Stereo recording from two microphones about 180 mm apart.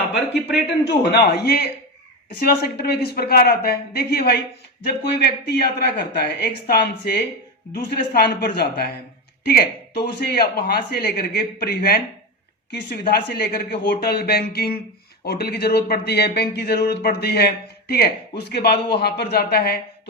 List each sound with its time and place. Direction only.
1.0 s speech: 65° left (ahead or behind)